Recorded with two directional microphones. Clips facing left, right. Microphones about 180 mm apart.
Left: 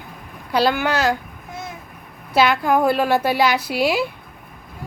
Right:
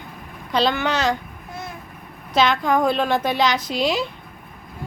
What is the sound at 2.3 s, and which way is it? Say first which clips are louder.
A woman's voice: left 2 dB; 5° left (ahead or behind).